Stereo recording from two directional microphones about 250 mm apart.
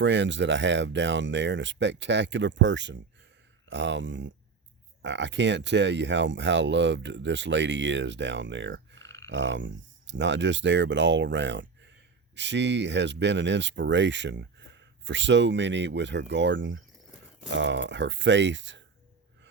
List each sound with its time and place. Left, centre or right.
0.0 s speech: right
9.0 s a sound: centre
9.3 s speech: right